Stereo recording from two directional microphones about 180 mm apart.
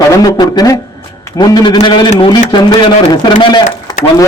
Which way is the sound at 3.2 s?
25° left (ahead or behind).